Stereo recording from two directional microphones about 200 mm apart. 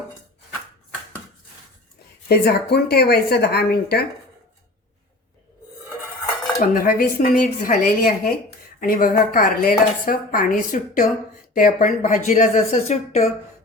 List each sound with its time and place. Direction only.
2.3 s speech: 50° left (ahead or behind)
6.6 s speech: 45° left (ahead or behind)